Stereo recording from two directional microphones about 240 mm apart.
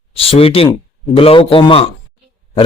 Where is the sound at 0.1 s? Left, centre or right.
Left.